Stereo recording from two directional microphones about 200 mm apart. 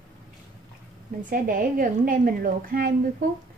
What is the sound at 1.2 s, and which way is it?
A woman's voice, 45° right (ahead or behind).